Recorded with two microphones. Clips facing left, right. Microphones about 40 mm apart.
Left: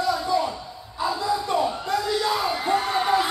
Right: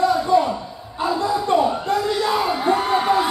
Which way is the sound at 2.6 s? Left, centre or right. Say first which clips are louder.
Right 4 dB; centre.